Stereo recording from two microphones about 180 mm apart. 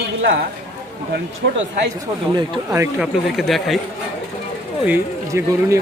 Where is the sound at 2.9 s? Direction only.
Centre (ahead or behind).